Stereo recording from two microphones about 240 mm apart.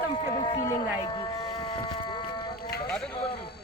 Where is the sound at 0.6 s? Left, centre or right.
Centre.